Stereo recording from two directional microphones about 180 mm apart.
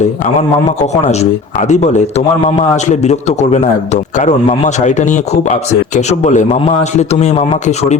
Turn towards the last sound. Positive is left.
turn(degrees=40)  # may be behind; listen again after turning